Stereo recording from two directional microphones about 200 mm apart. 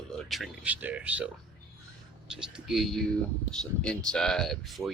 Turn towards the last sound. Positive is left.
turn(degrees=0)  # may be behind; listen again after turning